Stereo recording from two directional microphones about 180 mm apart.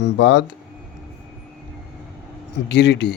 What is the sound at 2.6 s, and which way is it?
Speech, 70° left (ahead or behind).